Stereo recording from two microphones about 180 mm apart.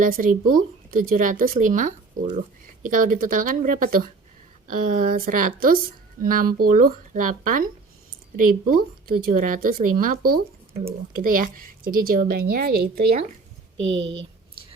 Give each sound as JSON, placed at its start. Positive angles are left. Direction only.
{"t": 0.0, "sound": "speech", "side_deg": -50}
{"t": 13.7, "sound": "speech", "side_deg": -90}